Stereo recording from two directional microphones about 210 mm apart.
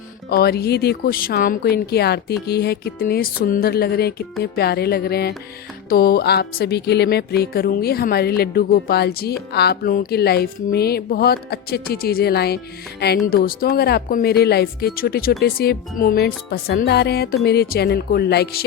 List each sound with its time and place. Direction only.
0.3 s speech: 50° left (ahead or behind)